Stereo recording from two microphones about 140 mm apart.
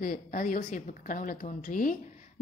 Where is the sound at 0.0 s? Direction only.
80° left.